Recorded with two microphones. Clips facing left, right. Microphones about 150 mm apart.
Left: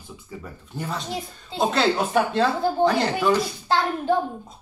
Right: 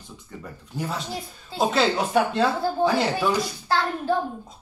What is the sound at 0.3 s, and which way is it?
Speech, centre (ahead or behind).